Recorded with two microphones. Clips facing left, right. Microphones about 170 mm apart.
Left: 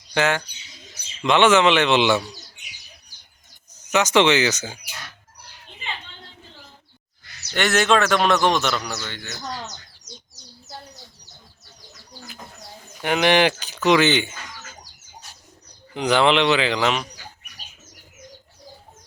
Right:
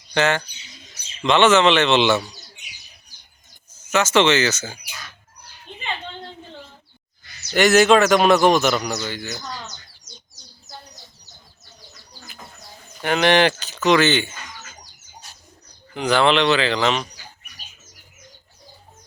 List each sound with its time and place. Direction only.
0.1 s speech: 10° left (ahead or behind)
3.8 s speech: 15° left (ahead or behind)
7.5 s speech: 5° right (ahead or behind)
13.0 s speech: 15° left (ahead or behind)
16.0 s speech: 15° left (ahead or behind)